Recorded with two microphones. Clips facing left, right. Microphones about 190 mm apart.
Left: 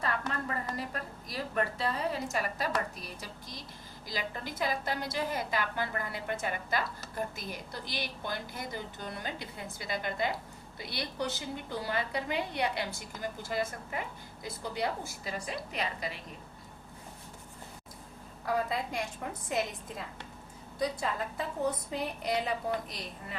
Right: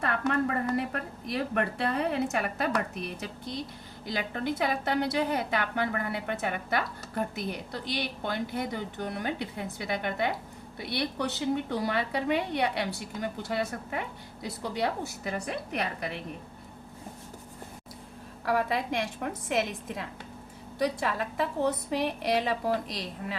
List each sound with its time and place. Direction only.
0.0 s a woman's voice: 60° right (ahead or behind)
18.4 s a woman's voice: 80° right